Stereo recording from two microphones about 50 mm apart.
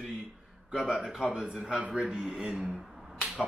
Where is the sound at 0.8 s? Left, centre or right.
Centre.